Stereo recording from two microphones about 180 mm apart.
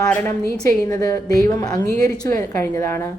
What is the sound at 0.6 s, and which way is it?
A woman's voice, 15° left (ahead or behind).